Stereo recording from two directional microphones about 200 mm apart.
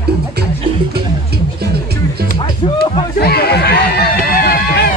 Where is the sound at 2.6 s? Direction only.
25° left (ahead or behind).